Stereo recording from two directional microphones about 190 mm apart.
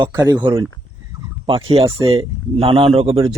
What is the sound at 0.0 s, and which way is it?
Speech, 20° right (ahead or behind).